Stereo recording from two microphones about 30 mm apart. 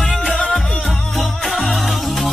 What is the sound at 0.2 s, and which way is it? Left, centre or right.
Music, left.